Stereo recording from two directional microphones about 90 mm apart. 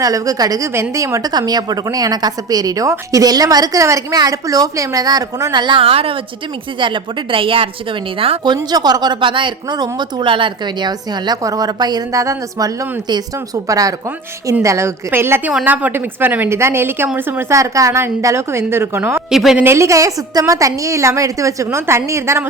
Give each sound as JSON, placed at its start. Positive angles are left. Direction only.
{"t": 0.0, "sound": "a woman's voice", "side_deg": -40}
{"t": 0.7, "sound": "a woman's voice", "side_deg": -30}
{"t": 1.3, "sound": "a woman's voice", "side_deg": -50}
{"t": 6.7, "sound": "a woman's voice", "side_deg": -65}
{"t": 8.7, "sound": "a woman's voice", "side_deg": -50}
{"t": 12.2, "sound": "a woman's voice", "side_deg": -40}
{"t": 17.6, "sound": "a woman's voice", "side_deg": -35}
{"t": 19.3, "sound": "a woman's voice", "side_deg": 0}
{"t": 19.6, "sound": "a woman's voice", "side_deg": -30}